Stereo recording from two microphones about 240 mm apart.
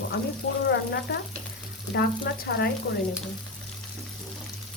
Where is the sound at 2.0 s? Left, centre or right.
Left.